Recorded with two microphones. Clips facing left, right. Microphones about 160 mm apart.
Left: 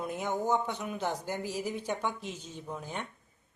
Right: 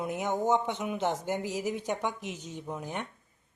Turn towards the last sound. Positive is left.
turn(degrees=-15)  # may be behind; listen again after turning